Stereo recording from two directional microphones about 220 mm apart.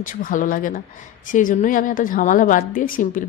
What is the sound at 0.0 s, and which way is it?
A woman's voice, 35° left (ahead or behind).